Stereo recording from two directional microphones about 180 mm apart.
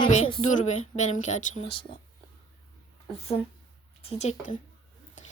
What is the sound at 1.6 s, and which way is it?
Speech, 30° left (ahead or behind).